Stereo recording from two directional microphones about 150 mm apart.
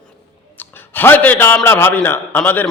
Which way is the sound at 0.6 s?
15° left (ahead or behind).